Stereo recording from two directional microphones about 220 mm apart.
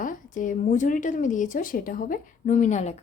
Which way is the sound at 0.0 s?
35° left (ahead or behind).